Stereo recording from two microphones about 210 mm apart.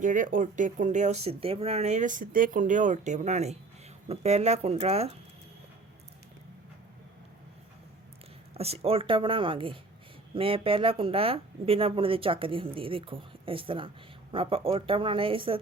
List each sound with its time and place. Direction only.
0.0 s speech: 40° right (ahead or behind)
8.5 s speech: 30° right (ahead or behind)